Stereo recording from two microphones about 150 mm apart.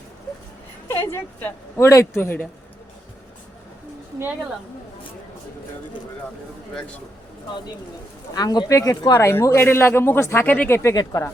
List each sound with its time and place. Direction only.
0.9 s speech: 15° left (ahead or behind)
8.4 s speech: 25° left (ahead or behind)
10.9 s speech: 25° left (ahead or behind)